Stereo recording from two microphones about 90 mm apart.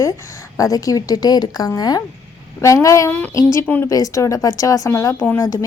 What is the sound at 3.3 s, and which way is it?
Speech, 35° left (ahead or behind).